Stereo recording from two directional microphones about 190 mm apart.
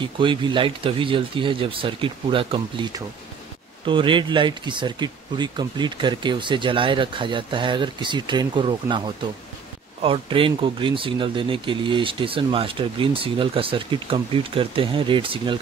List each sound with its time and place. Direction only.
0.0 s speech: 25° right (ahead or behind)